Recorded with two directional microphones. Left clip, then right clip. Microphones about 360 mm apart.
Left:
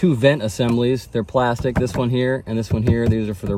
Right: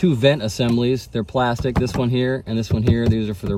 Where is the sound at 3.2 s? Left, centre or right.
Left.